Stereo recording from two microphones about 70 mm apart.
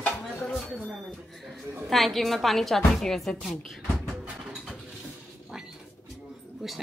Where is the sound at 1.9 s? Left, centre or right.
Centre.